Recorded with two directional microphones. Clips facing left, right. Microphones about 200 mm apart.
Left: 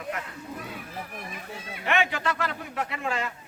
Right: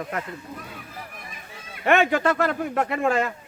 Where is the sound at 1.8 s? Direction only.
50° right (ahead or behind).